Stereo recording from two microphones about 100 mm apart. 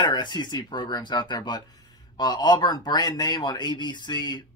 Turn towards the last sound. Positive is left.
turn(degrees=45)  # may be behind; listen again after turning